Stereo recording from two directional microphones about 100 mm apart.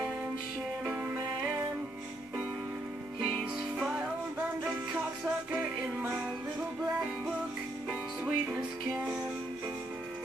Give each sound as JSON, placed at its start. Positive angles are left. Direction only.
{"t": 1.1, "sound": "music", "side_deg": -20}
{"t": 3.2, "sound": "music", "side_deg": -10}
{"t": 5.2, "sound": "music", "side_deg": -10}
{"t": 7.9, "sound": "music", "side_deg": -10}